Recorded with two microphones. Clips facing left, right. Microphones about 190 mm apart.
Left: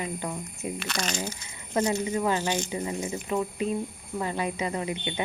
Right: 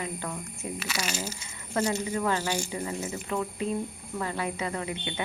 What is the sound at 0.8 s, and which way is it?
Speech, 5° right (ahead or behind).